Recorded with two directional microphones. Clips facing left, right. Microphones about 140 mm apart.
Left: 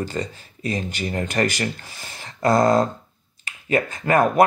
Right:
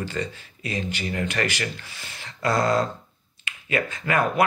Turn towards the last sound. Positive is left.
turn(degrees=40)  # may be behind; listen again after turning